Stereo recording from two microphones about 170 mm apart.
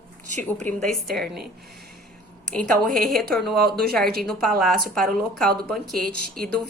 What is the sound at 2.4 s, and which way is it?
A woman's voice, 5° left (ahead or behind).